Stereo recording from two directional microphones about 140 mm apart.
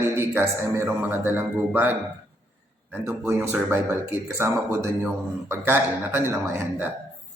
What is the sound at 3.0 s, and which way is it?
Mantra, 20° right (ahead or behind).